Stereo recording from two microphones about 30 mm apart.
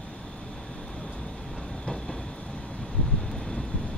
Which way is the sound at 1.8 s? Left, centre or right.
Centre.